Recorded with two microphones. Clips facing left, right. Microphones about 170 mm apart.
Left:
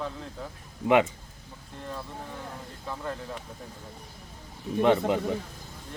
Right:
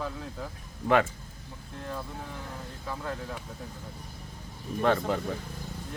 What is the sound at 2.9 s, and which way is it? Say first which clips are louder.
Speech: left 1 dB; centre (ahead or behind).